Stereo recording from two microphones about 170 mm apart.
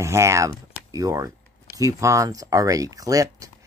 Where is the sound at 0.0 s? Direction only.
15° right (ahead or behind).